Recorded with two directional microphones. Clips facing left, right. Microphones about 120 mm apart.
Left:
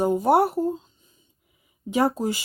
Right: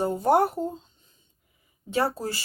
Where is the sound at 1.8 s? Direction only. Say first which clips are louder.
Left 4 dB; 15° left (ahead or behind).